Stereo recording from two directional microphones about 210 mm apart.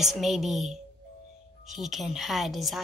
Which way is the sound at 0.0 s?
Centre (ahead or behind).